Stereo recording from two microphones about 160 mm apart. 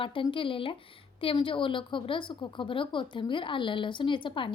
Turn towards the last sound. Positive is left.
turn(degrees=30)  # may be behind; listen again after turning